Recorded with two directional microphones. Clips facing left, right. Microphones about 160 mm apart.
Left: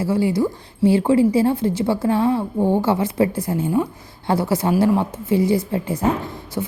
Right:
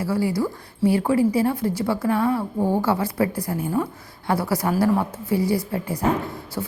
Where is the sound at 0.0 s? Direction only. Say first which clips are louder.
Left 4 dB; 25° left (ahead or behind).